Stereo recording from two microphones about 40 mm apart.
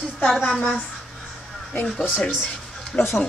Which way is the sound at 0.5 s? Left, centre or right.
Left.